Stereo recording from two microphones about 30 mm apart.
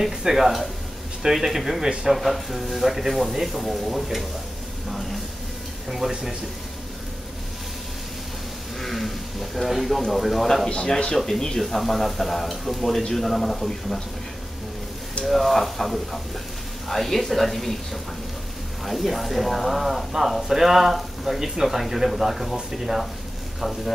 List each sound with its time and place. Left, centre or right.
0.2 s speech: centre
4.8 s a sound: centre
5.9 s speech: centre
8.7 s speech: centre
11.2 s speech: centre
11.6 s speech: centre
15.2 s speech: centre
18.9 s speech: centre